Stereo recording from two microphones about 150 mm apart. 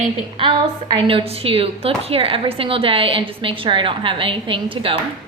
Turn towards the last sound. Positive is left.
turn(degrees=-35)  # may be behind; listen again after turning